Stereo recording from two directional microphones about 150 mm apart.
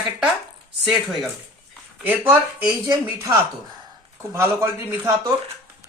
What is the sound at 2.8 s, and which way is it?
Speech, 25° right (ahead or behind).